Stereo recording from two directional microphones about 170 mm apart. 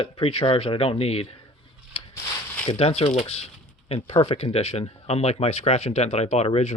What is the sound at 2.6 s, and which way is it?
Speech, 35° left (ahead or behind).